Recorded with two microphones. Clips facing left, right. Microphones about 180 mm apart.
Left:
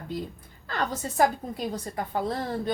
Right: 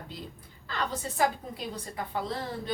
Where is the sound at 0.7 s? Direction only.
50° left (ahead or behind).